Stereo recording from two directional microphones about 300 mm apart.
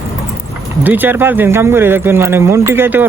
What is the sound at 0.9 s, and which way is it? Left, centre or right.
Speech, centre.